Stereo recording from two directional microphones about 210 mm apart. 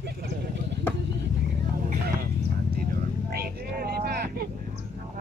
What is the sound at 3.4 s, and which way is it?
Vehicle, 45° right (ahead or behind).